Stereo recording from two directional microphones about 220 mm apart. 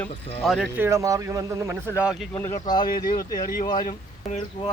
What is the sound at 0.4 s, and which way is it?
Speech, centre (ahead or behind).